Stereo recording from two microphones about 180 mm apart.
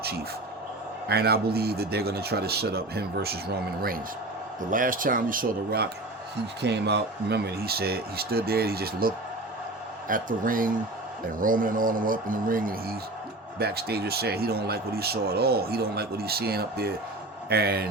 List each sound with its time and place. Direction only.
1.0 s speech: 60° right (ahead or behind)
6.6 s speech: 70° right (ahead or behind)